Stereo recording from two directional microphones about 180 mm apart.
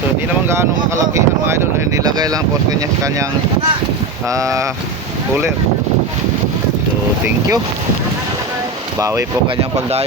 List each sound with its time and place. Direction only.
0.4 s speech: 15° right (ahead or behind)
4.3 s speech: 20° right (ahead or behind)
9.0 s speech: 15° right (ahead or behind)